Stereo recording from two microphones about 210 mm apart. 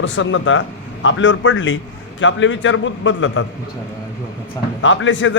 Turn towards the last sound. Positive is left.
turn(degrees=65)  # may be behind; listen again after turning